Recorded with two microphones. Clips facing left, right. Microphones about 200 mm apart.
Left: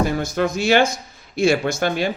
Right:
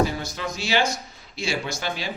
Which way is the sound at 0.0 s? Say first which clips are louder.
Left 5 dB; 50° left (ahead or behind).